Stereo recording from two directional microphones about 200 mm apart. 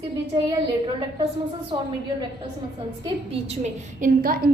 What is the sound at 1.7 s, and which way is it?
Speech, 25° right (ahead or behind).